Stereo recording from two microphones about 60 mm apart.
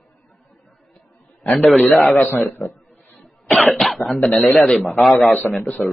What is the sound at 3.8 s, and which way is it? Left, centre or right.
A man's voice, centre.